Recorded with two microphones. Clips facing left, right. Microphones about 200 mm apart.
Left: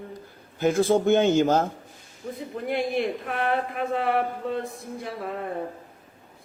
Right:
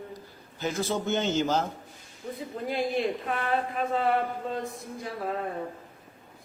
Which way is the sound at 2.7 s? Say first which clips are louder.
Left 2 dB; 60° left (ahead or behind).